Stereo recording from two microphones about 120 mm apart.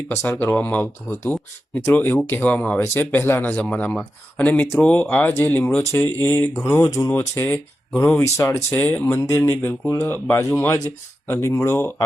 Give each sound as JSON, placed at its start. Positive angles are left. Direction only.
{"t": 0.1, "sound": "speech", "side_deg": 20}